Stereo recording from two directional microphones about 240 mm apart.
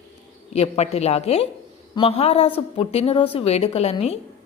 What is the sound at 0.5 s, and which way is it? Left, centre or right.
A woman's voice, left.